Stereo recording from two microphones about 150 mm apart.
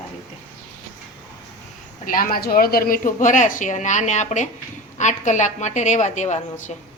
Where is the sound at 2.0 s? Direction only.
70° left (ahead or behind).